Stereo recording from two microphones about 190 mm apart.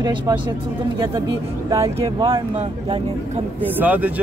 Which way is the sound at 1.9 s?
25° right (ahead or behind).